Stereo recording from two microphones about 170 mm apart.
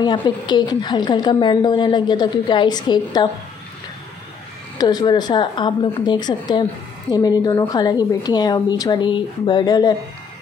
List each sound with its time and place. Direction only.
0.0 s a woman's voice: 25° left (ahead or behind)
4.7 s a woman's voice: 25° left (ahead or behind)